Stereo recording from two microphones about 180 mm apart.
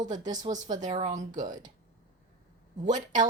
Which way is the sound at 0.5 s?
45° right (ahead or behind).